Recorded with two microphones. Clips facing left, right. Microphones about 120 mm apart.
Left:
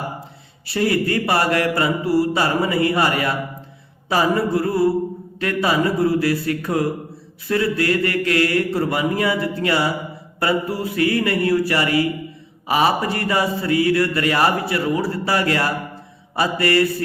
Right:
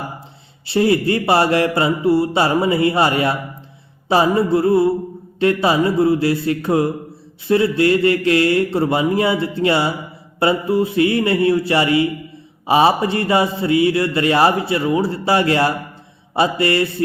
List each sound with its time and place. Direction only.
0.7 s speech: 25° right (ahead or behind)